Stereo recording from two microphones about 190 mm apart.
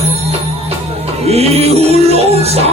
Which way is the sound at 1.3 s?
35° right (ahead or behind).